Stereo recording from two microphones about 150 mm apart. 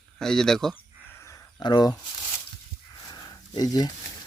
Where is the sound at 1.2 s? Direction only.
25° left (ahead or behind).